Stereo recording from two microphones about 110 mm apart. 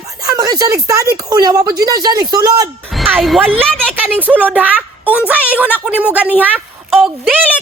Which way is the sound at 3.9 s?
15° right (ahead or behind).